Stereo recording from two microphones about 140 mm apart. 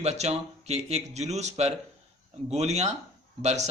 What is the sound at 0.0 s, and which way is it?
A man's voice, 50° right (ahead or behind).